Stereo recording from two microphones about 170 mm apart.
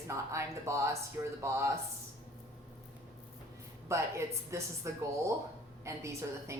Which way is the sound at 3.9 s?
15° right (ahead or behind).